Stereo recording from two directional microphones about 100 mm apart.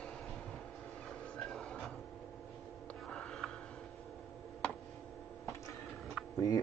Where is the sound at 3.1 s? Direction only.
10° left (ahead or behind).